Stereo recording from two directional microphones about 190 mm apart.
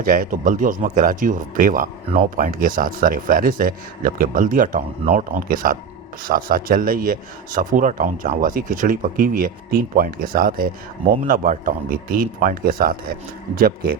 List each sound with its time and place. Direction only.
0.0 s speech: 45° right (ahead or behind)